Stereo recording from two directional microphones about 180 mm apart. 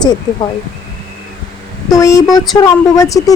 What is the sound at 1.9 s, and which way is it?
Speech, 15° left (ahead or behind).